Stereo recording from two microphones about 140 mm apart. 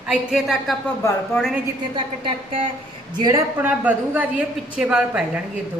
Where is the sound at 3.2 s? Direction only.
30° right (ahead or behind).